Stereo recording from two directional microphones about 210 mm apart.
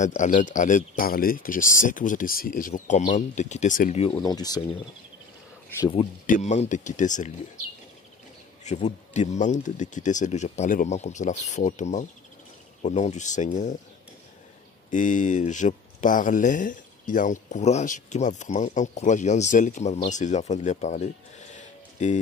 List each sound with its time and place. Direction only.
0.0 s speech: 35° left (ahead or behind)
4.2 s speech: 20° left (ahead or behind)
5.8 s speech: 25° left (ahead or behind)
6.2 s speech: 35° left (ahead or behind)
8.6 s speech: 35° left (ahead or behind)
14.9 s speech: 35° left (ahead or behind)